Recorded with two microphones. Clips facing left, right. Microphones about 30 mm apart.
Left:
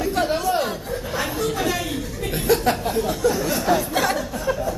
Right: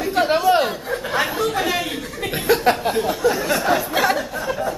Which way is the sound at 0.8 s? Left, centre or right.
Right.